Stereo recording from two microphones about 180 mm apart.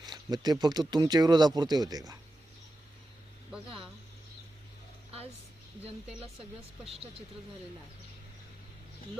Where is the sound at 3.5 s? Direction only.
5° right (ahead or behind).